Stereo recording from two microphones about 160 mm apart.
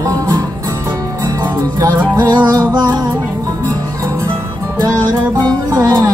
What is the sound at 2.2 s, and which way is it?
Music, 25° right (ahead or behind).